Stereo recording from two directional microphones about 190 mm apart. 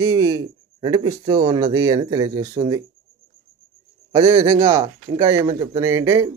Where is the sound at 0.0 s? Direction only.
20° right (ahead or behind).